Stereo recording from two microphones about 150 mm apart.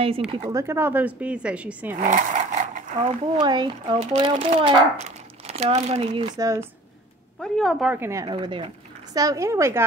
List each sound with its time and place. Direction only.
0.5 s speech: 20° right (ahead or behind)
2.0 s a sound: 55° right (ahead or behind)
3.0 s a child's voice: 30° right (ahead or behind); by 6.1 s 45° right (ahead or behind)
6.1 s speech: 25° right (ahead or behind)
7.4 s a woman's voice: centre (ahead or behind)
7.9 s speech: 20° right (ahead or behind)
8.3 s speech: 35° right (ahead or behind); by 9.8 s 20° right (ahead or behind)